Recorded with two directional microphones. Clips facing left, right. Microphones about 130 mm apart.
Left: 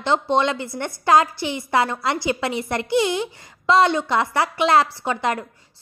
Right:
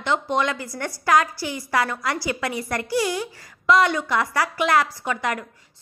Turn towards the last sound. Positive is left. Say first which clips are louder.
# left 3 dB
turn(degrees=30)  # may be behind; listen again after turning